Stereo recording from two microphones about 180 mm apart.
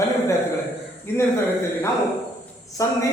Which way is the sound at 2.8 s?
20° left (ahead or behind).